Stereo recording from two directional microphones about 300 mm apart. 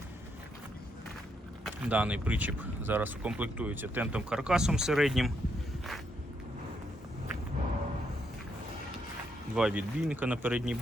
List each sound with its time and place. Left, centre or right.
1.6 s speech: centre
9.6 s speech: centre